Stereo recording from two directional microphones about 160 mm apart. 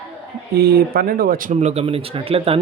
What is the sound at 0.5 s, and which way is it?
Speech, 80° right.